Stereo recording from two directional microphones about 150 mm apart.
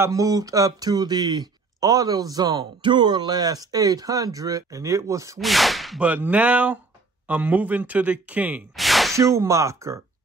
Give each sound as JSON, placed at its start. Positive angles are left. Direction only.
{"t": 0.0, "sound": "speech", "side_deg": -20}
{"t": 5.4, "sound": "whip", "side_deg": 0}
{"t": 8.7, "sound": "a sound", "side_deg": 0}
{"t": 9.4, "sound": "speech", "side_deg": -20}